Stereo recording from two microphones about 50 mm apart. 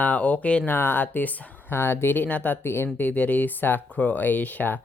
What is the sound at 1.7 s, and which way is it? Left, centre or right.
Speech, left.